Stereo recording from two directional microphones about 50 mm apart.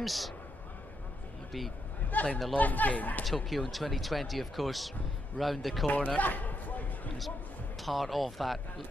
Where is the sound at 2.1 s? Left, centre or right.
Left.